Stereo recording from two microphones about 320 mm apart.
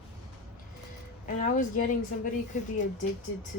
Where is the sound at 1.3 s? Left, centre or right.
Left.